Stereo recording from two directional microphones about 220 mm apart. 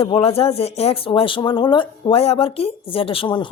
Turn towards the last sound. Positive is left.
turn(degrees=20)  # may be behind; listen again after turning